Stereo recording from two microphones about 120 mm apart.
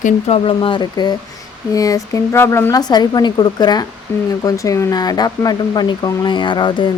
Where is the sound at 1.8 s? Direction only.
30° left (ahead or behind).